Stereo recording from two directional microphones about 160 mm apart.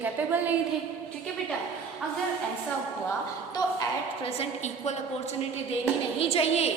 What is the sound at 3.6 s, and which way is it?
Speech, 25° left (ahead or behind).